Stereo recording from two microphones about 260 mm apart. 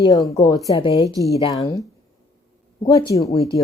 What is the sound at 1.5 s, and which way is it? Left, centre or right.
Speech, centre.